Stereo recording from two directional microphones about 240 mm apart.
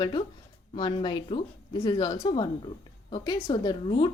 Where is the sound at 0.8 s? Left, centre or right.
Centre.